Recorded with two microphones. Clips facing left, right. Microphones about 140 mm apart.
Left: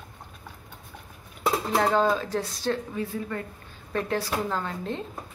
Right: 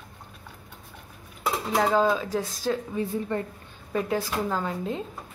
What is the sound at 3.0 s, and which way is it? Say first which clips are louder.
Speech: right 3 dB; 25° right (ahead or behind).